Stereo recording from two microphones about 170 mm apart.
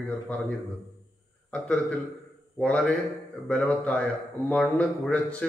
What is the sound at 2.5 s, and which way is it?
A man's voice, 5° left (ahead or behind).